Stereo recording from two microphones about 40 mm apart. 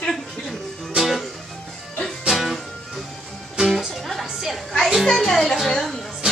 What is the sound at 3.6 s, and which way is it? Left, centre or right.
Music, centre.